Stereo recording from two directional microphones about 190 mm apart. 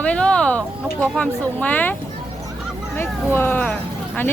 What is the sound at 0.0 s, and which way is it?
Speech, 5° left (ahead or behind).